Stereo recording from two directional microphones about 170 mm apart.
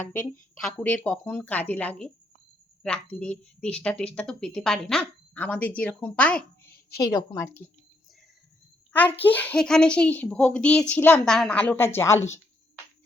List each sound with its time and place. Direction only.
0.2 s a woman's voice: 5° left (ahead or behind)
6.9 s a woman's voice: 20° left (ahead or behind)
8.9 s a child's voice: 10° left (ahead or behind)